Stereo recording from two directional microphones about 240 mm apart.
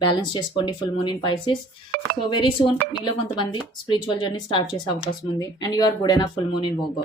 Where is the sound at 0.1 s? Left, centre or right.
Centre.